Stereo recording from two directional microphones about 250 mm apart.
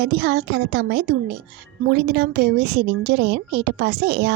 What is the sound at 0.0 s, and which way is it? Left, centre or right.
A woman's voice, right.